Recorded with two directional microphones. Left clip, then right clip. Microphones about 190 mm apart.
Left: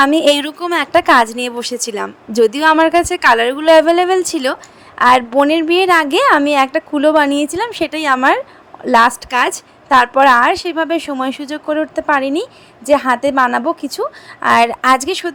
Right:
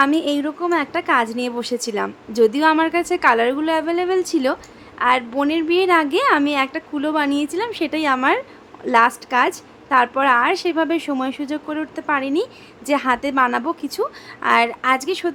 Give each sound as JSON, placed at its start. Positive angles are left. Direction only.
{"t": 0.0, "sound": "a woman's voice", "side_deg": 30}